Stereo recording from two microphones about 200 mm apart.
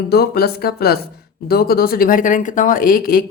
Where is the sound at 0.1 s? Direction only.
50° left (ahead or behind).